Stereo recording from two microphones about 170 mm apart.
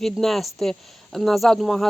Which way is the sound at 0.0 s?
Centre (ahead or behind).